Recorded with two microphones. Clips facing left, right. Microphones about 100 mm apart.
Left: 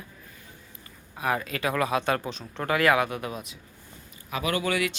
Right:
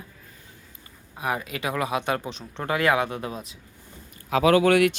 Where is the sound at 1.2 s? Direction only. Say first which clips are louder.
Left 1 dB; 20° right (ahead or behind).